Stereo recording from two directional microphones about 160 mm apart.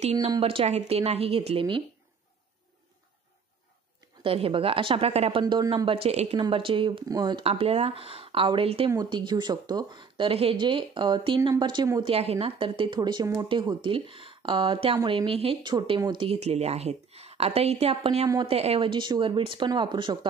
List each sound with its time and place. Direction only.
0.0 s speech: 40° right (ahead or behind)
4.2 s speech: 35° right (ahead or behind)
5.4 s speech: 25° right (ahead or behind)
12.1 s speech: 40° right (ahead or behind)
18.2 s speech: 25° right (ahead or behind)